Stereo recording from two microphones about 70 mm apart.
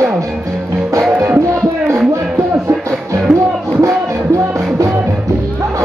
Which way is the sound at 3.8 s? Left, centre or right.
Right.